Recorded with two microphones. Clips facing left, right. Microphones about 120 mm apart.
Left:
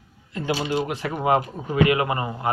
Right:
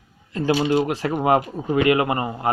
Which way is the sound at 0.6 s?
30° right (ahead or behind).